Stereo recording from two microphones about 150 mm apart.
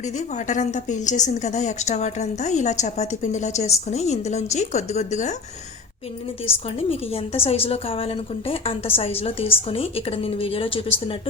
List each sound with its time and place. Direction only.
0.3 s a woman's voice: 55° left (ahead or behind)
7.1 s a woman's voice: 40° left (ahead or behind)